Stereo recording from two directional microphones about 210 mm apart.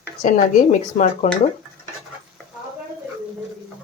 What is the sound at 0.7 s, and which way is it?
Speech, 35° left (ahead or behind).